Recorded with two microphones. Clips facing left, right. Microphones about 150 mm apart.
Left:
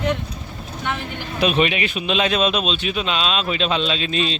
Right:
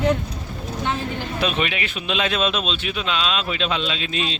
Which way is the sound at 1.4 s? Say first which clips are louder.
Left 6 dB; 20° left (ahead or behind).